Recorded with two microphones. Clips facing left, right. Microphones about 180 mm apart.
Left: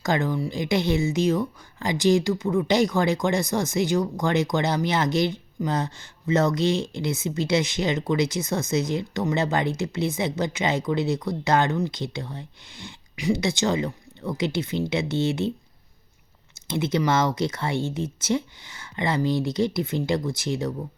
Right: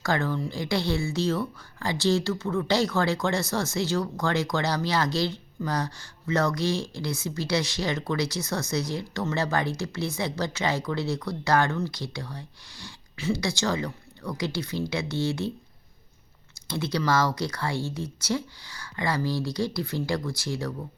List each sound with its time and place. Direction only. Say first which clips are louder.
0.0 s speech: left 3 dB; 20° left (ahead or behind)
16.6 s speech: left 3 dB; 20° left (ahead or behind)